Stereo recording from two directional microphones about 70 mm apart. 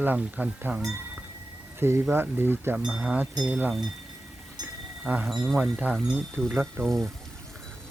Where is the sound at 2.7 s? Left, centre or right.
Centre.